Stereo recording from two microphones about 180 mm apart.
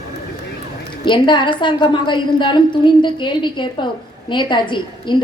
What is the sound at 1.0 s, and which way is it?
A woman's voice, 25° left (ahead or behind).